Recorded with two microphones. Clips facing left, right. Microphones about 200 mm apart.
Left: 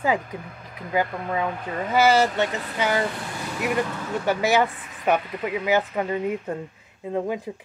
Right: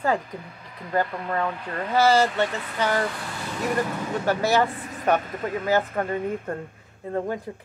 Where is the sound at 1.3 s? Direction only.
10° left (ahead or behind).